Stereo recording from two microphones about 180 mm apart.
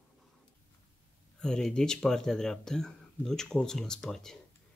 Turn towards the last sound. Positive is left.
turn(degrees=5)  # may be behind; listen again after turning